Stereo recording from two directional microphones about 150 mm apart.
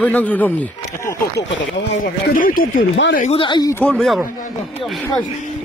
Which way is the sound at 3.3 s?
30° left (ahead or behind).